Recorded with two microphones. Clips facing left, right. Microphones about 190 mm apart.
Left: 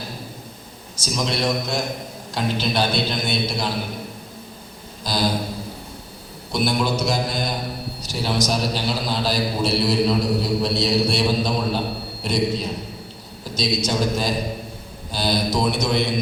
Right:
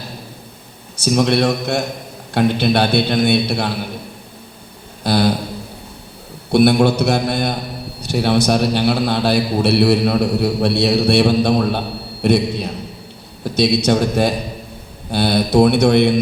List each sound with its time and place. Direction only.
0.9 s a man's voice: 60° right (ahead or behind)
5.0 s a man's voice: 60° right (ahead or behind)
6.5 s a man's voice: 65° right (ahead or behind)